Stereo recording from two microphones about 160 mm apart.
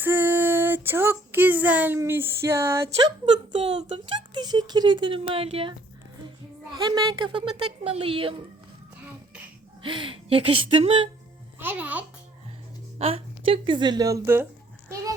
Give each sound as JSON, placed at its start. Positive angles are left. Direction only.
{"t": 0.0, "sound": "child singing", "side_deg": -15}
{"t": 2.9, "sound": "speech", "side_deg": -35}
{"t": 6.7, "sound": "a woman's voice", "side_deg": -25}
{"t": 9.8, "sound": "speech", "side_deg": -30}
{"t": 11.6, "sound": "a child's voice", "side_deg": -10}
{"t": 13.0, "sound": "a woman's voice", "side_deg": -35}